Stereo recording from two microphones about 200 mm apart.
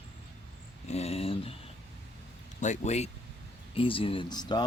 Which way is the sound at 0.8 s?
30° left (ahead or behind).